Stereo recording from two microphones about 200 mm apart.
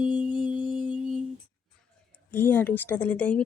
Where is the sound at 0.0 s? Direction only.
40° right (ahead or behind).